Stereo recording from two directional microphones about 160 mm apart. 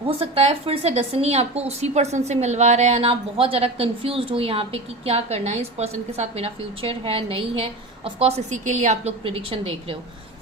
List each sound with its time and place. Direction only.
0.0 s a woman's voice: 35° right (ahead or behind)